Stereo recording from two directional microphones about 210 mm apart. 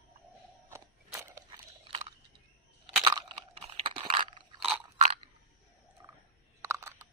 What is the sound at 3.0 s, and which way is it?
Crunch, 25° right (ahead or behind).